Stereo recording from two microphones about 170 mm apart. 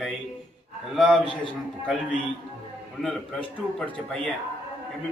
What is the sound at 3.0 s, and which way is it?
Speech, centre (ahead or behind).